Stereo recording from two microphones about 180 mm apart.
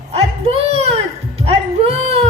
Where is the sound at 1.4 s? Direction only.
35° right (ahead or behind).